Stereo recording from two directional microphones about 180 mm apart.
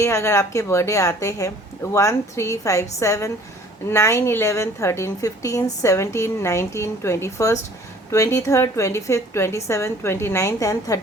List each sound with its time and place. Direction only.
0.0 s a woman's voice: 15° left (ahead or behind)